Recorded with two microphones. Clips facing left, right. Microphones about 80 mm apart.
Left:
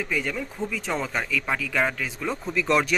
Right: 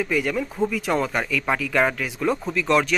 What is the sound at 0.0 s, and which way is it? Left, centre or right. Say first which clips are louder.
Speech: right 5 dB; centre.